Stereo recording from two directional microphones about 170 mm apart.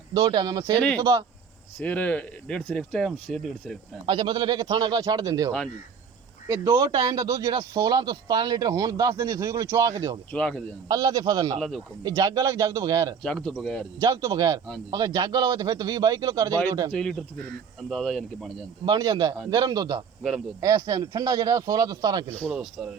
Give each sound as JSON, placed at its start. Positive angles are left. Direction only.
{"t": 0.1, "sound": "speech", "side_deg": -20}
{"t": 1.8, "sound": "speech", "side_deg": 10}
{"t": 4.0, "sound": "speech", "side_deg": -25}
{"t": 6.5, "sound": "speech", "side_deg": -20}
{"t": 10.3, "sound": "speech", "side_deg": 5}
{"t": 10.8, "sound": "speech", "side_deg": -20}
{"t": 13.2, "sound": "speech", "side_deg": 5}
{"t": 14.0, "sound": "speech", "side_deg": -20}
{"t": 16.9, "sound": "speech", "side_deg": 5}
{"t": 18.9, "sound": "speech", "side_deg": -25}
{"t": 22.3, "sound": "speech", "side_deg": 10}
{"t": 22.8, "sound": "speech", "side_deg": -5}